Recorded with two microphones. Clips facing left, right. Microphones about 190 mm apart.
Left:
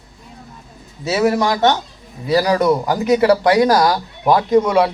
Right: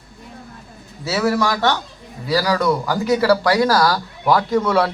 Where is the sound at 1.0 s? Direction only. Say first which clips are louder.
Left 3 dB; 20° left (ahead or behind).